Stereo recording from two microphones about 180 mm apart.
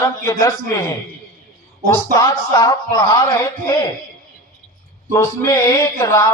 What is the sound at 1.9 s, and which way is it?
Speech, 15° left (ahead or behind).